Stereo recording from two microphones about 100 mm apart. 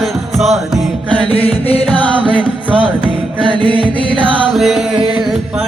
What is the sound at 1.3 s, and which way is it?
Music, 75° left (ahead or behind).